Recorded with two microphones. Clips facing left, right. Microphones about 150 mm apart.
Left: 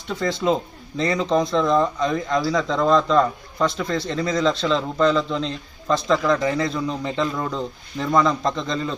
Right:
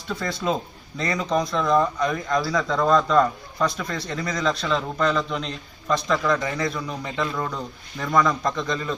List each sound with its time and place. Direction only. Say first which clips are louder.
0.2 s speech: left 6 dB; 25° left (ahead or behind)